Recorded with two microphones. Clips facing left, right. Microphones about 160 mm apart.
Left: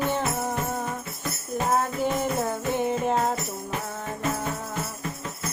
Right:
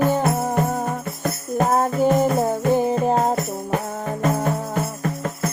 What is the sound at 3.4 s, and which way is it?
Music, 55° right (ahead or behind).